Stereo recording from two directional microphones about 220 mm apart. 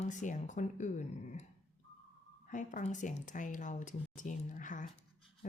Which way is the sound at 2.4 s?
35° left (ahead or behind).